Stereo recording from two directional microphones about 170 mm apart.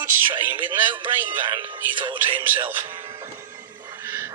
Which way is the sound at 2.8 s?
30° right (ahead or behind).